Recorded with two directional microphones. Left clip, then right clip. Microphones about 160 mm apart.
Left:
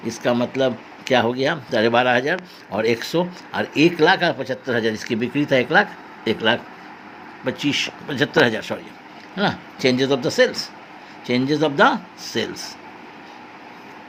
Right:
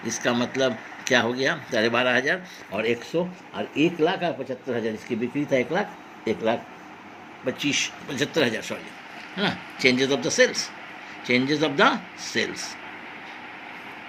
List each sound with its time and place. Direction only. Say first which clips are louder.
0.0 s speech: left 4 dB; 55° left (ahead or behind)